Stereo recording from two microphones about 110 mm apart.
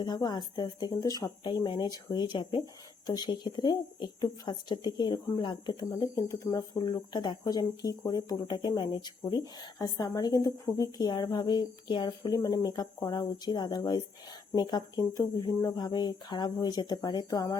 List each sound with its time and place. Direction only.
0.0 s speech: 40° left (ahead or behind)
5.9 s speech: 35° left (ahead or behind)